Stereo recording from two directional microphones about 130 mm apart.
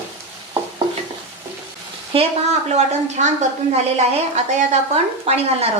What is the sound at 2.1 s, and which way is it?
A woman's voice, 55° right (ahead or behind).